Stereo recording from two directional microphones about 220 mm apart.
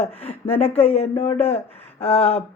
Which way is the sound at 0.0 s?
30° left (ahead or behind).